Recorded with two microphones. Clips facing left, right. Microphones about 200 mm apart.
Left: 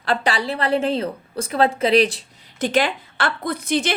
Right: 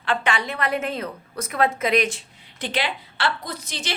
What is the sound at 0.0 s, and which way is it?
A woman's voice, 35° left (ahead or behind).